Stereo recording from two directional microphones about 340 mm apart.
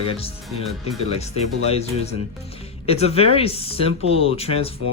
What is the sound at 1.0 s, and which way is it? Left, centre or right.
Speech, centre.